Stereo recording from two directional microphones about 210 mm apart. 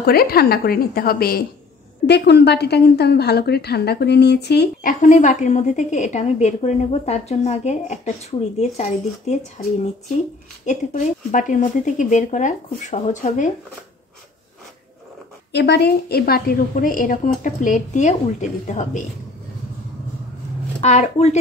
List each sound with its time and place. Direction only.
0.0 s a woman's voice: 45° left (ahead or behind)
5.0 s a woman's voice: 35° left (ahead or behind)
15.5 s a woman's voice: 50° left (ahead or behind); by 19.0 s 35° left (ahead or behind)
20.8 s a woman's voice: 35° left (ahead or behind)